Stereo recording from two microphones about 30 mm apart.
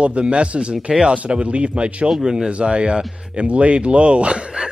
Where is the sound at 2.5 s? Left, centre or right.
Right.